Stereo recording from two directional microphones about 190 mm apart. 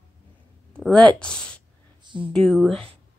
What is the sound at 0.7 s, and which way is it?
Speech, 5° left (ahead or behind).